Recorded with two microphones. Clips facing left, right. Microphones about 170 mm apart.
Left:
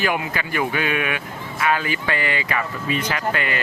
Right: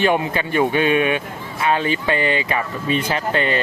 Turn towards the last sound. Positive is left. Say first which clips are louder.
# right 4 dB
turn(degrees=-25)  # may be behind; listen again after turning